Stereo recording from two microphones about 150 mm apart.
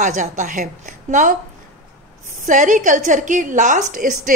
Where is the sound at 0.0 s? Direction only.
55° right (ahead or behind).